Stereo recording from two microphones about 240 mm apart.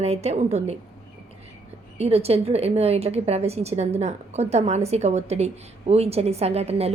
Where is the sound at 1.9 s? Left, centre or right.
Right.